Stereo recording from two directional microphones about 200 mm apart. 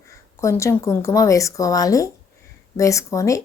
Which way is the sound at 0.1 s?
15° left (ahead or behind).